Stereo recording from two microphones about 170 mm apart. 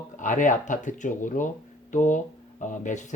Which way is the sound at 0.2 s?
50° left (ahead or behind).